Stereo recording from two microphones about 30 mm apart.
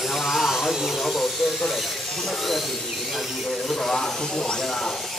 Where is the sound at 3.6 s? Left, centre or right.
Centre.